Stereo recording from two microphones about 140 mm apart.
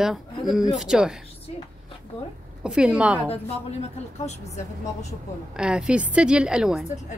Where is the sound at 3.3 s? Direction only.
50° left (ahead or behind).